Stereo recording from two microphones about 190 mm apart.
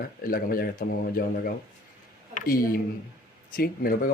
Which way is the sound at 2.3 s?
50° left (ahead or behind).